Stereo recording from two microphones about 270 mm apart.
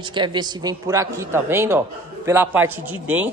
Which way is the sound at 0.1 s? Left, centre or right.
Centre.